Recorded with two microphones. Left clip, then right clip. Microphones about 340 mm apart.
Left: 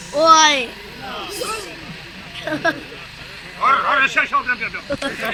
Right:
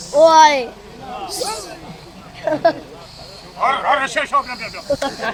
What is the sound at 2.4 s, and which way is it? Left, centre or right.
Vehicle, centre.